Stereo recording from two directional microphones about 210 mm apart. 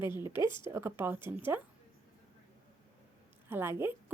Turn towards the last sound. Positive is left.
turn(degrees=-10)  # may be behind; listen again after turning